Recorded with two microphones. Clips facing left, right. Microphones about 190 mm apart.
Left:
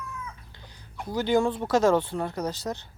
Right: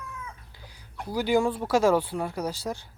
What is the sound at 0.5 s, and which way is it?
Speech, 10° right (ahead or behind).